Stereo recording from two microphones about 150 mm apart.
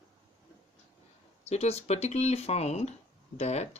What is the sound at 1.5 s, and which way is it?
Speech, 45° left (ahead or behind).